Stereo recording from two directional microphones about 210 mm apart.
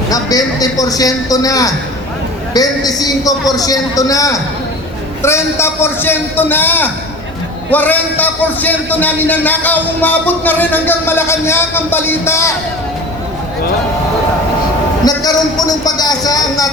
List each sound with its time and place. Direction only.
0.1 s a man's voice: 15° left (ahead or behind)
15.0 s a man's voice: 20° left (ahead or behind)